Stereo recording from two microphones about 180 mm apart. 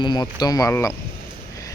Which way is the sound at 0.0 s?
25° left (ahead or behind).